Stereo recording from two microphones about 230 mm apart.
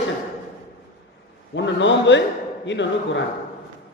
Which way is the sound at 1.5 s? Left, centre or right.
Left.